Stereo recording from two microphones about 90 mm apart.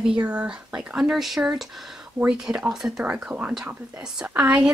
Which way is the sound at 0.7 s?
5° right (ahead or behind).